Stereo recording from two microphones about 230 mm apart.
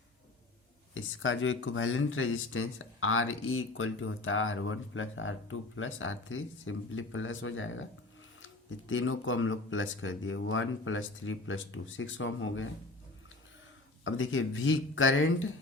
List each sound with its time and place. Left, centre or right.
0.9 s speech: left
8.9 s speech: left
14.0 s speech: left